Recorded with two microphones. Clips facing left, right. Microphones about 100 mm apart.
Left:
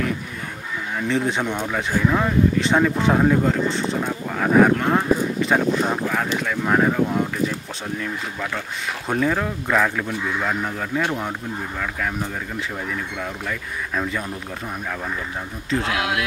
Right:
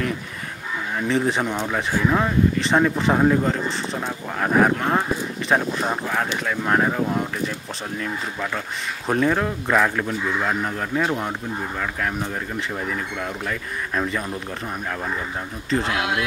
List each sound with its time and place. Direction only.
0.9 s speech: centre (ahead or behind)
9.0 s speech: centre (ahead or behind)
15.7 s speech: centre (ahead or behind)